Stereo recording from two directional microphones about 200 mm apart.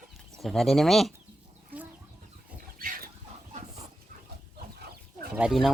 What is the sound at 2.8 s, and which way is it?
Pig, 45° right (ahead or behind).